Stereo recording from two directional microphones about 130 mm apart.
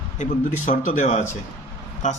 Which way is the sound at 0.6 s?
80° left.